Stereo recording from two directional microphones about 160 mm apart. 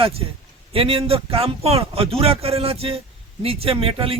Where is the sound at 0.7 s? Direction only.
35° right (ahead or behind).